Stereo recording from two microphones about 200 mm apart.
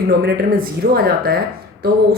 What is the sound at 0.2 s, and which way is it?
A woman's voice, 50° right (ahead or behind).